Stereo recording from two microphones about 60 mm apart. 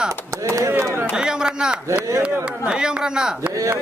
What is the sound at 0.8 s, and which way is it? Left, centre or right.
Speech, right.